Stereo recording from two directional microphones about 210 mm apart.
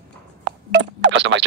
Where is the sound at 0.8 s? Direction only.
60° right (ahead or behind).